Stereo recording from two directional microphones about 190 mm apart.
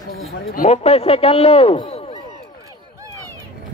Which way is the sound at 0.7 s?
30° left (ahead or behind).